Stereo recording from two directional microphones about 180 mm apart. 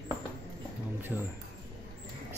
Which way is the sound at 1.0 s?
10° right (ahead or behind).